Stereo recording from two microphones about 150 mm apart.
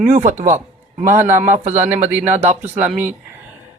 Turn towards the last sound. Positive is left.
turn(degrees=-5)  # may be behind; listen again after turning